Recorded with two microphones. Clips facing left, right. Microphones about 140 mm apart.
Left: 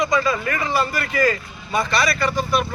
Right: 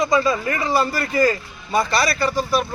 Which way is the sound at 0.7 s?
30° right (ahead or behind).